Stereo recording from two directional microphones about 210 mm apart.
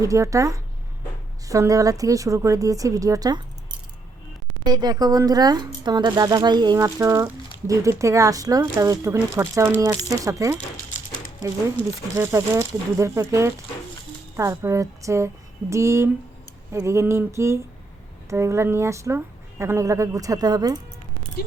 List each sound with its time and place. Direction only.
0.0 s a woman's voice: 15° right (ahead or behind)
4.6 s a woman's voice: 20° right (ahead or behind)
12.1 s a woman's voice: 10° right (ahead or behind)